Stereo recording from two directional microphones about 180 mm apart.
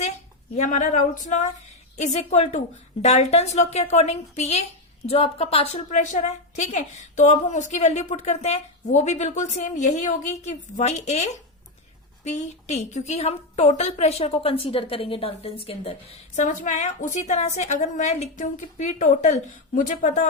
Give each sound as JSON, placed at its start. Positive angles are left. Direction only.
{"t": 0.5, "sound": "a woman's voice", "side_deg": 40}